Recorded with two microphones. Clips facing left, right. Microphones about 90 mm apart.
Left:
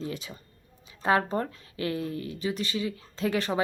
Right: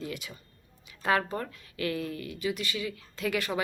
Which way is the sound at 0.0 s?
25° left (ahead or behind).